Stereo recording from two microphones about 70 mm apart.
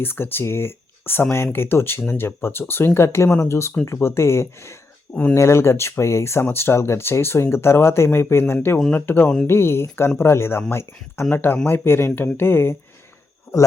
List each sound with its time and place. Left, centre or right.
0.0 s speech: left